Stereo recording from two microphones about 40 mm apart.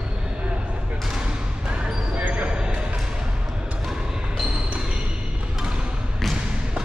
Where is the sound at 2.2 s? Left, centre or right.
Right.